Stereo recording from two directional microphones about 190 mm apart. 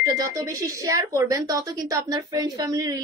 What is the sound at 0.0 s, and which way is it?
A woman's voice, 15° right (ahead or behind).